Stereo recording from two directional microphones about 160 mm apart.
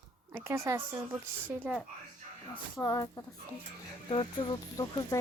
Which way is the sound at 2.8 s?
20° left (ahead or behind).